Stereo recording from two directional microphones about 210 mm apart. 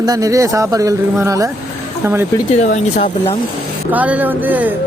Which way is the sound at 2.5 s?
35° left (ahead or behind).